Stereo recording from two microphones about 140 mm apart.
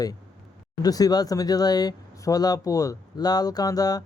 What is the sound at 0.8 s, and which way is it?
Speech, 25° left (ahead or behind).